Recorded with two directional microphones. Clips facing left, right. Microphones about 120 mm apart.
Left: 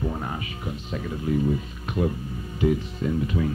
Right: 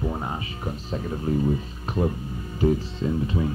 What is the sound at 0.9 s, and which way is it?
Speech, 35° right (ahead or behind).